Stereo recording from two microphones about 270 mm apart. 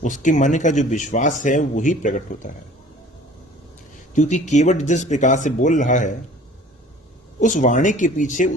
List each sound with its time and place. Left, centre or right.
0.0 s speech: left
4.1 s speech: left
7.3 s speech: left